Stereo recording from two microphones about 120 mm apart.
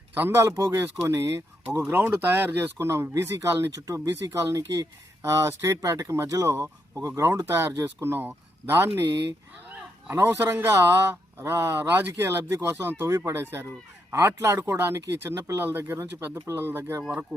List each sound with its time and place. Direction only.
0.2 s speech: 20° right (ahead or behind)
10.1 s speech: 20° right (ahead or behind)